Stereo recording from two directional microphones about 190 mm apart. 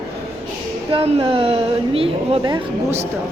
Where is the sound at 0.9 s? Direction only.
30° right (ahead or behind).